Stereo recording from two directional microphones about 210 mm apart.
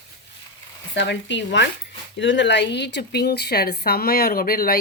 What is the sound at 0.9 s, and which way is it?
Speech, 55° left (ahead or behind).